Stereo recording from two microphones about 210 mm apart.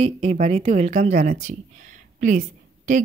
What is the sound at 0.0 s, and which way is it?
A woman's voice, 30° right (ahead or behind).